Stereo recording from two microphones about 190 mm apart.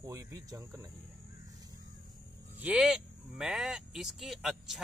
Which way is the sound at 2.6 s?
5° right (ahead or behind).